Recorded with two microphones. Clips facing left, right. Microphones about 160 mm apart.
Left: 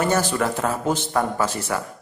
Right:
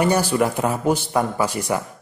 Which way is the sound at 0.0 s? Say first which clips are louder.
Right 3 dB; 10° right (ahead or behind).